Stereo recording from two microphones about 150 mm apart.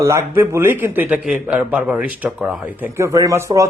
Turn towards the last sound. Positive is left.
turn(degrees=-20)  # may be behind; listen again after turning